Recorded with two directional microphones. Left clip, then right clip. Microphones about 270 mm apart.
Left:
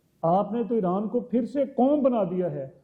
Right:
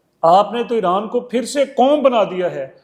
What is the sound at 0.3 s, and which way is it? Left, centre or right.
A man's voice, centre.